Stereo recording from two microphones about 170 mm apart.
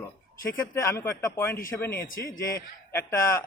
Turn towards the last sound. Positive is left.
turn(degrees=15)  # may be behind; listen again after turning